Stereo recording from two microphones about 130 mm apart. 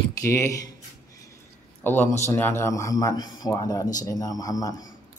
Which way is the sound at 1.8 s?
15° left (ahead or behind).